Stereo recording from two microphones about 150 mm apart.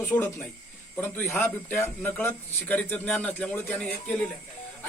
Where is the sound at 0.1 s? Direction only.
20° left (ahead or behind).